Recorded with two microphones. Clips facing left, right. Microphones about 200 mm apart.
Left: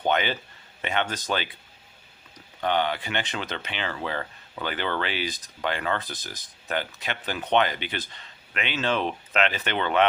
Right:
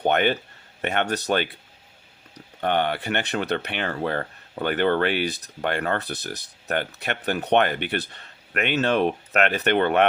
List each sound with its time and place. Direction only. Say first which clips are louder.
0.1 s speech: right 3 dB; 55° right (ahead or behind)
2.6 s speech: right 2 dB; 55° right (ahead or behind)